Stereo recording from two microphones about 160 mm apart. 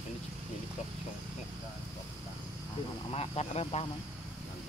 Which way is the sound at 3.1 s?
40° left (ahead or behind).